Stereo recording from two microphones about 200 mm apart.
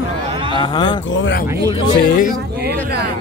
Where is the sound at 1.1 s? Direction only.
70° left (ahead or behind).